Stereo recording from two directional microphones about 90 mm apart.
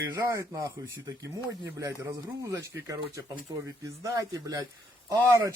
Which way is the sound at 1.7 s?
35° right (ahead or behind).